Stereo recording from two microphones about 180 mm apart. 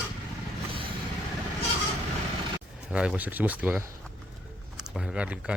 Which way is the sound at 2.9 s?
5° right (ahead or behind).